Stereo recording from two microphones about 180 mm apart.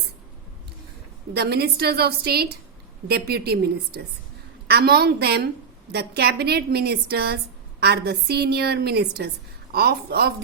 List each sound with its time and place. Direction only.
1.3 s a woman's voice: 65° right (ahead or behind)